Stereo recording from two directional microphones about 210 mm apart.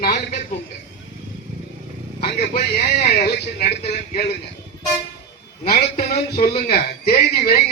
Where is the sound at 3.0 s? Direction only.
35° left (ahead or behind).